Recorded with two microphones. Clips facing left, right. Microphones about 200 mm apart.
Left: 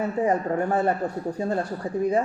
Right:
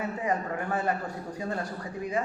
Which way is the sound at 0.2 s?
40° left (ahead or behind).